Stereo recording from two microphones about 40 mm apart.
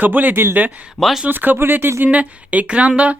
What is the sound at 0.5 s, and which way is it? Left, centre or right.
Speech, right.